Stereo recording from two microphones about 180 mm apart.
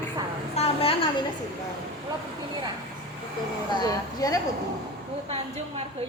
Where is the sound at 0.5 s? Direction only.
35° left (ahead or behind).